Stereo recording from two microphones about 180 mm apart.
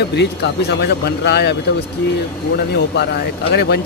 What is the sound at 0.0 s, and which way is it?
Speech, 70° left (ahead or behind).